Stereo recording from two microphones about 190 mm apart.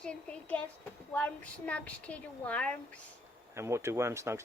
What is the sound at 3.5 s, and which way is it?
Speech, 15° right (ahead or behind).